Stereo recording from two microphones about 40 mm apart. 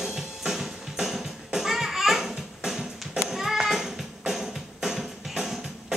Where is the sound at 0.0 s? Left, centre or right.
Centre.